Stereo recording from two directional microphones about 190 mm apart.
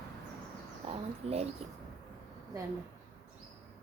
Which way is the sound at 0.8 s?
30° right (ahead or behind).